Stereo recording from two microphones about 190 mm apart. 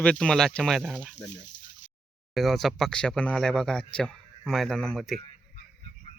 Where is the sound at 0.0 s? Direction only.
5° left (ahead or behind).